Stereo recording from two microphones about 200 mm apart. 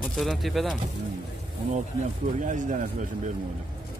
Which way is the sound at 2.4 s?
40° right (ahead or behind).